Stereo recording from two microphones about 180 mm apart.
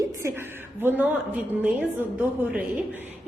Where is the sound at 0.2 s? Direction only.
15° right (ahead or behind).